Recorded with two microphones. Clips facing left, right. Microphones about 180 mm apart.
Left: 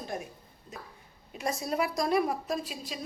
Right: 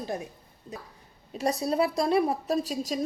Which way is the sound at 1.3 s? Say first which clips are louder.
Right 5 dB; 35° right (ahead or behind).